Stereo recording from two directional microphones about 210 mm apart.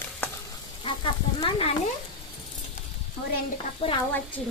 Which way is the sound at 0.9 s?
25° left (ahead or behind).